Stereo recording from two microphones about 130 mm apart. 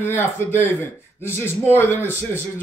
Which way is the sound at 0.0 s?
15° left (ahead or behind).